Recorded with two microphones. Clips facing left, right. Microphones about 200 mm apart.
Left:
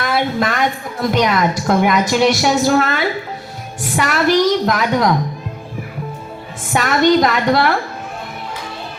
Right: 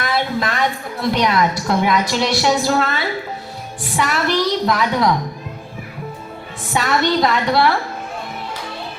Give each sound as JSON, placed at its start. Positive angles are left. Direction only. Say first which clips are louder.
{"t": 0.0, "sound": "a sound", "louder": "left 3 dB", "side_deg": 50}
{"t": 1.1, "sound": "a woman's voice", "louder": "left 2 dB", "side_deg": 50}
{"t": 6.7, "sound": "a woman's voice", "louder": "left 4 dB", "side_deg": 50}